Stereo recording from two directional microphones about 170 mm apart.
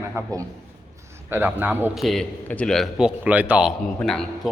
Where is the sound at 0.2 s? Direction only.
15° right (ahead or behind).